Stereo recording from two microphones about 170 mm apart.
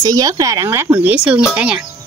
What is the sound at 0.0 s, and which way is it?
Speech, 20° right (ahead or behind).